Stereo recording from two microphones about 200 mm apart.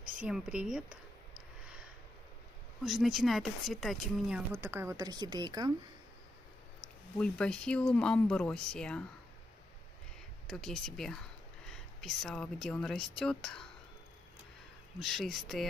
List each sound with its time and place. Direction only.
0.2 s speech: 5° right (ahead or behind)
2.8 s speech: centre (ahead or behind)
4.6 s a woman's voice: 10° right (ahead or behind)
7.2 s speech: 5° left (ahead or behind)
10.4 s speech: 5° left (ahead or behind)
15.0 s speech: centre (ahead or behind)